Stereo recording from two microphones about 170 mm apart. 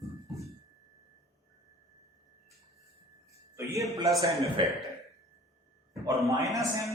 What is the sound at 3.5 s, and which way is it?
Speech, 15° right (ahead or behind).